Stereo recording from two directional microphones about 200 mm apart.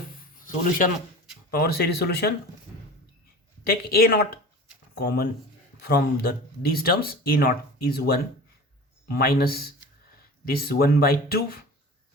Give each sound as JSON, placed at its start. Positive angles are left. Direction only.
{"t": 0.3, "sound": "a sound", "side_deg": 40}
{"t": 1.5, "sound": "speech", "side_deg": 50}
{"t": 3.7, "sound": "speech", "side_deg": 50}